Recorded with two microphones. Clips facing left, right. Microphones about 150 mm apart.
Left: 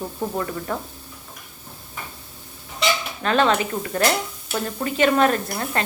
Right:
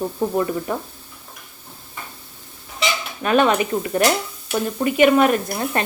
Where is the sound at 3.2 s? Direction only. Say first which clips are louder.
Right 3 dB; 15° right (ahead or behind).